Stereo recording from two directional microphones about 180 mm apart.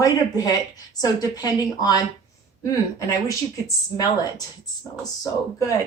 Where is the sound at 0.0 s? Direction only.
20° left (ahead or behind).